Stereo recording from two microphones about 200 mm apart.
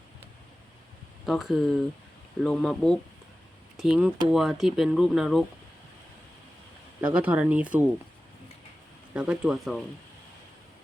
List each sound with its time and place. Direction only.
1.2 s speech: centre (ahead or behind)
7.0 s speech: 5° right (ahead or behind)
9.1 s speech: 5° right (ahead or behind)